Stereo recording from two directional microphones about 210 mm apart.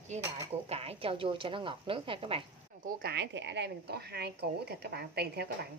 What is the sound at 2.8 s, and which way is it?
Speech, 50° right (ahead or behind).